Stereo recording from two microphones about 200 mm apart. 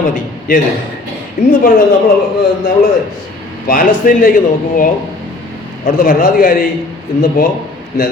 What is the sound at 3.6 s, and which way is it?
Speech, 45° left (ahead or behind).